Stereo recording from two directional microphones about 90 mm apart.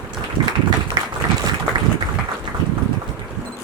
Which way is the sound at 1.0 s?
60° right (ahead or behind).